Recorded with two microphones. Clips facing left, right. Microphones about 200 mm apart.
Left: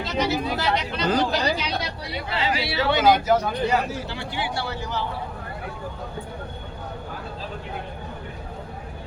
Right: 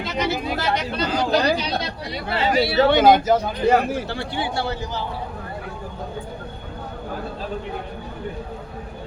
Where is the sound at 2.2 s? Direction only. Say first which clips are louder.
Right 7 dB; 55° right (ahead or behind).